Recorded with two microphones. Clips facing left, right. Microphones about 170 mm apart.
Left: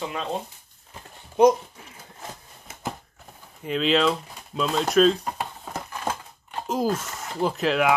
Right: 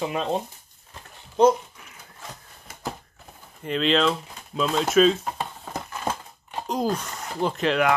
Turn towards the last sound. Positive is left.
turn(degrees=0)  # may be behind; listen again after turning